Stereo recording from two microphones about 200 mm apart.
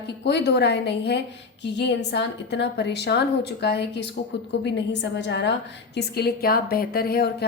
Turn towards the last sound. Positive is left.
turn(degrees=50)  # may be behind; listen again after turning